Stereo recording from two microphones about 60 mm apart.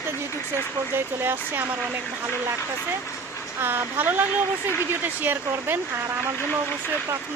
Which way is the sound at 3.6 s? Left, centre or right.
Right.